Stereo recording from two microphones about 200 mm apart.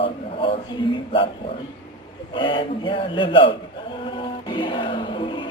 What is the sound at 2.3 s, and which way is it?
A man's voice, 25° left (ahead or behind).